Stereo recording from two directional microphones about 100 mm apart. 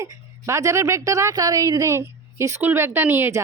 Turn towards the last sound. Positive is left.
turn(degrees=-20)  # may be behind; listen again after turning